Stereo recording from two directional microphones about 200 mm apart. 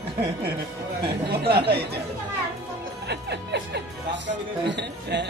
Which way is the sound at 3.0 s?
60° right (ahead or behind).